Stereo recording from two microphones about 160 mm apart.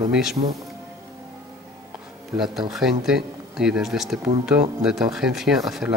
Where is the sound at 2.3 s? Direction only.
Centre (ahead or behind).